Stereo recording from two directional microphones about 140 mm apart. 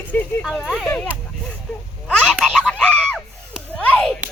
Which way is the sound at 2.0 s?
5° left (ahead or behind).